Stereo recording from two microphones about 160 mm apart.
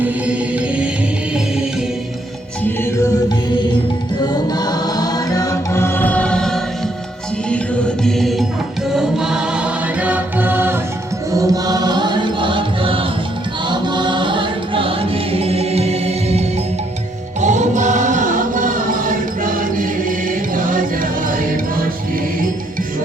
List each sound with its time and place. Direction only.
0.0 s music: 10° right (ahead or behind)
4.2 s music: 25° left (ahead or behind); by 16.4 s 40° right (ahead or behind)
17.4 s chant: 50° right (ahead or behind)